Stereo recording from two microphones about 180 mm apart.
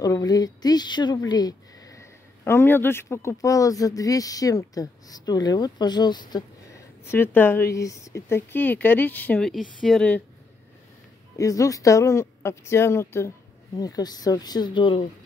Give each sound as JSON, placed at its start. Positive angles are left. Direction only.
{"t": 0.0, "sound": "speech", "side_deg": 20}
{"t": 7.1, "sound": "speech", "side_deg": 10}
{"t": 11.3, "sound": "speech", "side_deg": 20}